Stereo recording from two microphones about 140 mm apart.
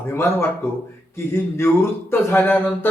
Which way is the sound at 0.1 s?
15° left (ahead or behind).